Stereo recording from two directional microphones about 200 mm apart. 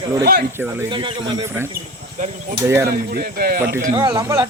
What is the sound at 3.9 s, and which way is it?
Speech, 20° right (ahead or behind).